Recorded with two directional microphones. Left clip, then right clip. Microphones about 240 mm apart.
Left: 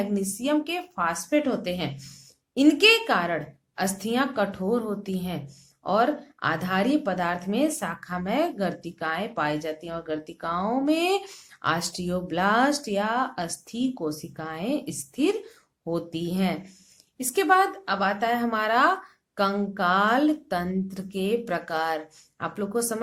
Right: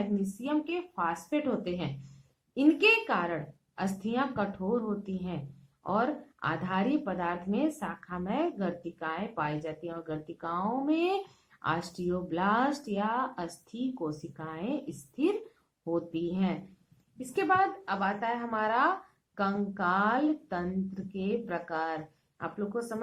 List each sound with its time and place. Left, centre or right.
0.4 s speech: left